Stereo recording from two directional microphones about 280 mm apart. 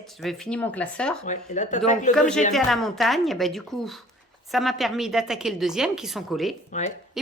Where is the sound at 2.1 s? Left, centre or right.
Centre.